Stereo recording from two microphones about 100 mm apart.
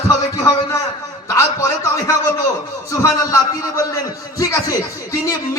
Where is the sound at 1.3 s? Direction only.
30° left (ahead or behind).